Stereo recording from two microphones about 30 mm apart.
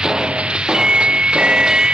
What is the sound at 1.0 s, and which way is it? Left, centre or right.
Music, right.